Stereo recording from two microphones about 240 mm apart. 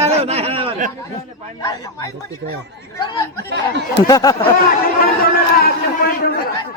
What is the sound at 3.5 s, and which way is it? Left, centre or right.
Speech, right.